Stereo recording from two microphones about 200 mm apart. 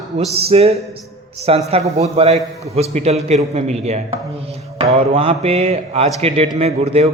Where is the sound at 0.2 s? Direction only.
30° right (ahead or behind).